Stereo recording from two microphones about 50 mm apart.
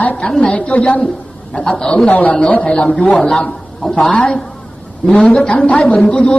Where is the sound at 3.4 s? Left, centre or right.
Left.